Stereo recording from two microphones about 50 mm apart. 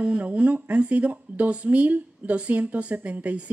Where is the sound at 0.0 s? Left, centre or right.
Right.